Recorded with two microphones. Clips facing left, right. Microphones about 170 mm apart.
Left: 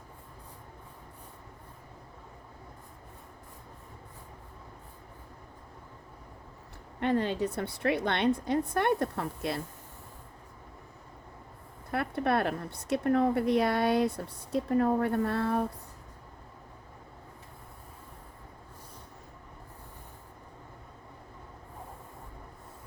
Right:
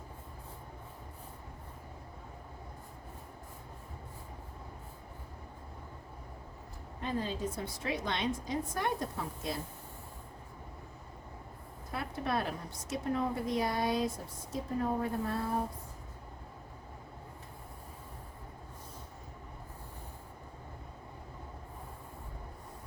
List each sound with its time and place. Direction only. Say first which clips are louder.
7.0 s a woman's voice: left 7 dB; 70° left (ahead or behind)
11.9 s a woman's voice: left 7 dB; 60° left (ahead or behind)